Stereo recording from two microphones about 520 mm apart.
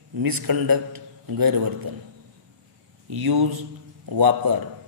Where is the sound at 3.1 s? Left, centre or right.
Right.